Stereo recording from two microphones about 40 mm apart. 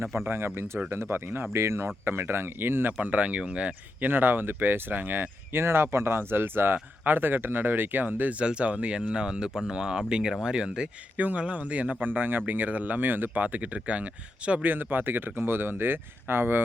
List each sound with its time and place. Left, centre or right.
0.3 s speech: right
1.6 s speech: right
3.0 s speech: right
4.0 s speech: right
8.4 s speech: right
11.2 s speech: right
13.3 s speech: right
14.6 s speech: right